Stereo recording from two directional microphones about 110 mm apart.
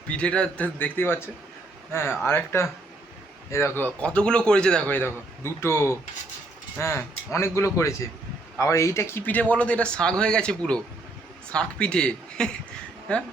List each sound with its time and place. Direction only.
0.1 s speech: 10° left (ahead or behind)
3.8 s speech: 10° left (ahead or behind)